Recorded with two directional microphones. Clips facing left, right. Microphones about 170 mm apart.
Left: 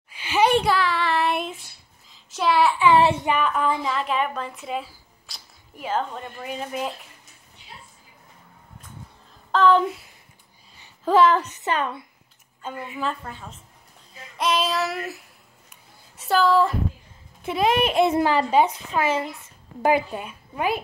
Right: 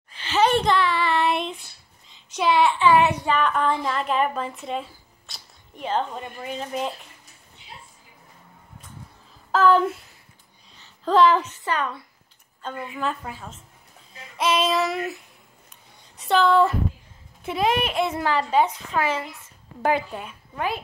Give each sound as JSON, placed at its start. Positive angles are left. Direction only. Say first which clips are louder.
{"t": 0.1, "sound": "a child's voice", "louder": "left 1 dB", "side_deg": 10}
{"t": 0.7, "sound": "child singing", "louder": "right 1 dB", "side_deg": 0}
{"t": 2.9, "sound": "a child's voice", "louder": "left 2 dB", "side_deg": 25}
{"t": 3.3, "sound": "a woman's voice", "louder": "even", "side_deg": 10}
{"t": 6.1, "sound": "a woman's voice", "louder": "right 1 dB", "side_deg": -10}
{"t": 6.4, "sound": "a woman's voice", "louder": "even", "side_deg": 5}
{"t": 9.5, "sound": "a woman's voice", "louder": "even", "side_deg": -5}
{"t": 10.7, "sound": "a sound", "louder": "left 1 dB", "side_deg": 5}
{"t": 11.6, "sound": "a child's voice", "louder": "left 1 dB", "side_deg": 20}
{"t": 12.6, "sound": "a woman's voice", "louder": "even", "side_deg": 5}
{"t": 15.7, "sound": "a sound", "louder": "left 2 dB", "side_deg": 0}
{"t": 17.5, "sound": "a child's voice", "louder": "left 2 dB", "side_deg": 20}
{"t": 19.8, "sound": "a woman's voice", "louder": "left 2 dB", "side_deg": 5}